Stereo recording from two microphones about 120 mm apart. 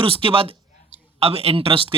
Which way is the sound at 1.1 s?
55° right (ahead or behind).